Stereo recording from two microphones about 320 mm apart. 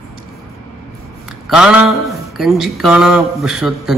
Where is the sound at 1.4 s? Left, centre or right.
Centre.